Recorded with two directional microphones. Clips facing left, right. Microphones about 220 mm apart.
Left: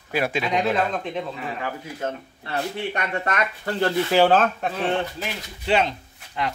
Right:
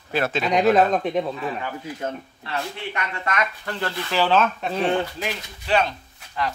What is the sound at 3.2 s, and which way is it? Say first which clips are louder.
Speech: left 1 dB; 35° left (ahead or behind).